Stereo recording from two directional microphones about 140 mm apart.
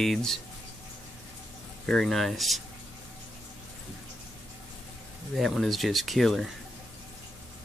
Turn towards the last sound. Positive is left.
turn(degrees=0)  # may be behind; listen again after turning